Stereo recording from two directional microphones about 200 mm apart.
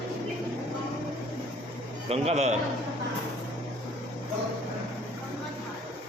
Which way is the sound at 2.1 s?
30° right (ahead or behind).